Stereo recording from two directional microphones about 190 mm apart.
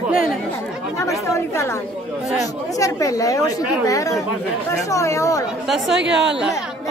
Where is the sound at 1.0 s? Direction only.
15° left (ahead or behind).